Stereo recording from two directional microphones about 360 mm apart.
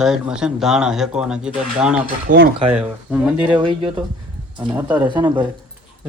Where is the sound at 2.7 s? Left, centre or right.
Centre.